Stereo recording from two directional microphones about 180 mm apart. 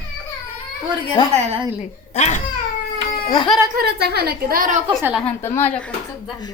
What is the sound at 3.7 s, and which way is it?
A woman's voice, 60° right (ahead or behind).